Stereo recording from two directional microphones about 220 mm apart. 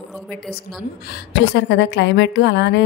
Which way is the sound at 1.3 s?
55° left (ahead or behind).